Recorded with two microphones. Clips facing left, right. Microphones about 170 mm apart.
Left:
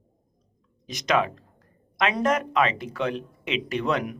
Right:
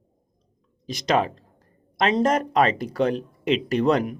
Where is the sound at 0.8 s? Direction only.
30° right (ahead or behind).